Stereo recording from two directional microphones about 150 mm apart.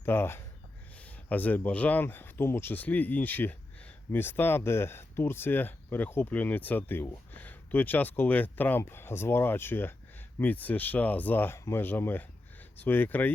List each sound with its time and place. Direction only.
0.0 s speech: 15° left (ahead or behind)